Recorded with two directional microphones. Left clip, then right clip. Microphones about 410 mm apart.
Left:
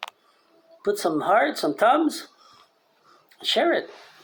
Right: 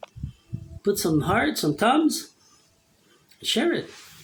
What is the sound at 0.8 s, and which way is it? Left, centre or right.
Speech, right.